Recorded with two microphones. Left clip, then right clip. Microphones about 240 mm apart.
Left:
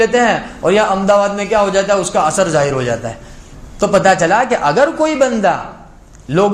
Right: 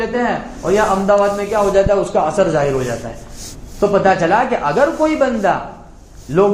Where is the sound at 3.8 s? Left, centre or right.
Left.